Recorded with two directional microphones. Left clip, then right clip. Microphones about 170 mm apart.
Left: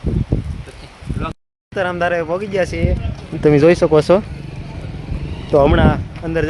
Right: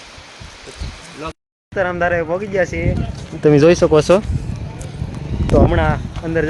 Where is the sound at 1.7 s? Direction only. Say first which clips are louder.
Right 1 dB; 10° left (ahead or behind).